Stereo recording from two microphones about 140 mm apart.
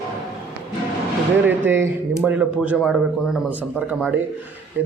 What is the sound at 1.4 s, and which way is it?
A man's voice, 15° right (ahead or behind).